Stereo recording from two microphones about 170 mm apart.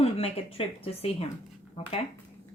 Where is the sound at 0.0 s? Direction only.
35° left (ahead or behind).